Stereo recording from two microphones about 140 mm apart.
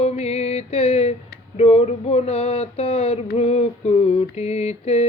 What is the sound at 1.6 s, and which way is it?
Mantra, 50° left (ahead or behind).